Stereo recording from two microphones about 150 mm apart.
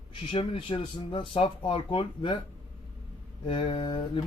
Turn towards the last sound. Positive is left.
turn(degrees=35)  # may be behind; listen again after turning